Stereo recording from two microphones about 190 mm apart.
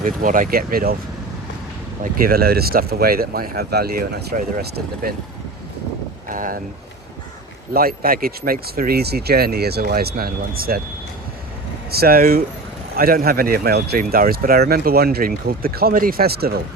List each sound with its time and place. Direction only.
0.0 s speech: 45° right (ahead or behind)
2.1 s speech: 50° right (ahead or behind)
6.2 s speech: 45° right (ahead or behind)
7.7 s speech: 50° right (ahead or behind)
11.9 s speech: 55° right (ahead or behind)